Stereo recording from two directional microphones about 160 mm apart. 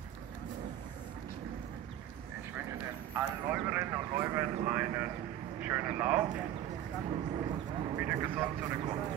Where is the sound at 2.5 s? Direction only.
15° right (ahead or behind).